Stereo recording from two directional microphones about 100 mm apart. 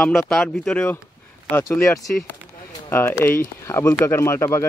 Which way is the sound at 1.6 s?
30° left (ahead or behind).